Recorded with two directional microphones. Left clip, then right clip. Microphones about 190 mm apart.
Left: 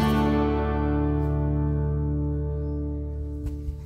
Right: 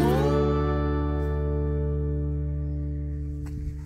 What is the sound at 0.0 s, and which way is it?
Music, centre (ahead or behind).